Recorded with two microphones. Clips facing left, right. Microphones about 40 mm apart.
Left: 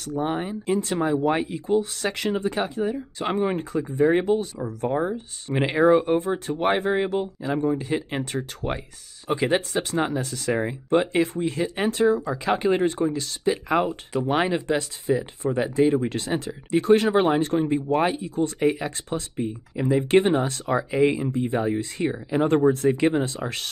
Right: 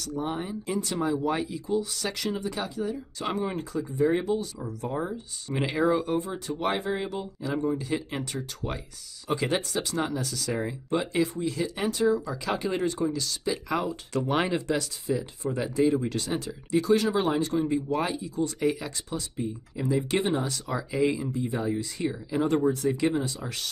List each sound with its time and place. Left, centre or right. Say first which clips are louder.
0.0 s speech: left 5 dB; left
14.1 s speech: left 3 dB; centre
14.7 s speech: left 4 dB; left